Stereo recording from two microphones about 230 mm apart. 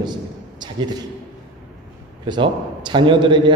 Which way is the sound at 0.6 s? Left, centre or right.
Centre.